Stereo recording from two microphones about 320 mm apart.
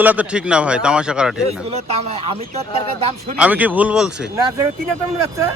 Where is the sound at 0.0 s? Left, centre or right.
Centre.